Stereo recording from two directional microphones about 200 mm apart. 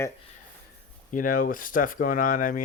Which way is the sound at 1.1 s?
45° left (ahead or behind).